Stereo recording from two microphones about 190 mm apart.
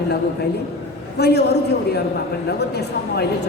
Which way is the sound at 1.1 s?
60° left (ahead or behind).